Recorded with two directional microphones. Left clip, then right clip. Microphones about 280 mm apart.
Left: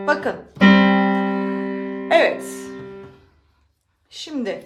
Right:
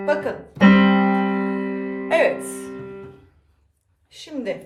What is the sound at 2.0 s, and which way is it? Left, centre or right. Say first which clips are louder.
Music: left 2 dB; centre.